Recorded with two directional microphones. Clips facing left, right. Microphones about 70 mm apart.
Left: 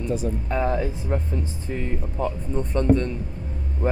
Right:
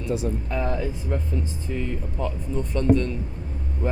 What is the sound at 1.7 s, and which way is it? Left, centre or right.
Speech, left.